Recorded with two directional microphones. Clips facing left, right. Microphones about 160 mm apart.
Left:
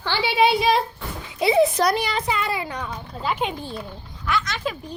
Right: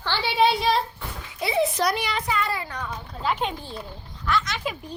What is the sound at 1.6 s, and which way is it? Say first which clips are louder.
Speech: left 3 dB; 45° left (ahead or behind).